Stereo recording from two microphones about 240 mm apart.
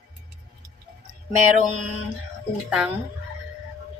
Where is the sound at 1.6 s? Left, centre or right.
Right.